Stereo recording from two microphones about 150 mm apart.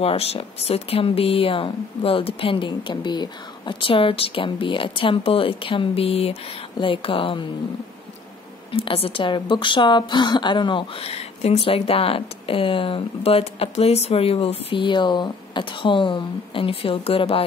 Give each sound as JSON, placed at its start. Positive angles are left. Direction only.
{"t": 0.0, "sound": "a woman's voice", "side_deg": 40}
{"t": 8.7, "sound": "a woman's voice", "side_deg": 40}